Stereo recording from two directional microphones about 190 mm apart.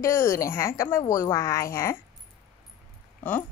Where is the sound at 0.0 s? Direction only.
15° left (ahead or behind).